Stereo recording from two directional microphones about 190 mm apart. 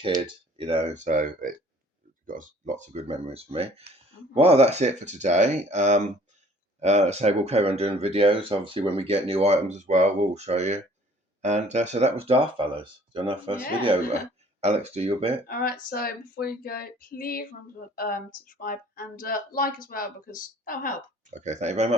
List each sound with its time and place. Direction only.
0.2 s speech: 30° right (ahead or behind)
14.6 s speech: 35° right (ahead or behind)
15.4 s a sound: 50° left (ahead or behind)
21.2 s speech: 40° right (ahead or behind)